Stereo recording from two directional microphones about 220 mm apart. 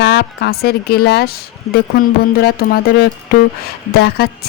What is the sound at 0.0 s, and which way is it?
A woman's voice, 50° left (ahead or behind).